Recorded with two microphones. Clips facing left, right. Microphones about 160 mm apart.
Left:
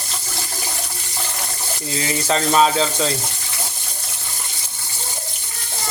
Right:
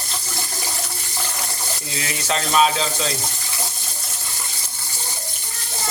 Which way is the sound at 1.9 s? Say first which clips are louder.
Left 4 dB; 30° left (ahead or behind).